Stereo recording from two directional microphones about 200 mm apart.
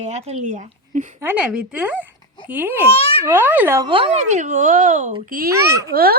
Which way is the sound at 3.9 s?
25° right (ahead or behind).